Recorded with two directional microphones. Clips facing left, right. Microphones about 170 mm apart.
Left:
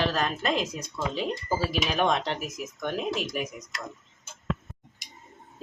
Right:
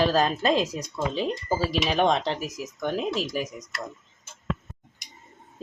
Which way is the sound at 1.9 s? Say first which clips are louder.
Right 3 dB; 30° right (ahead or behind).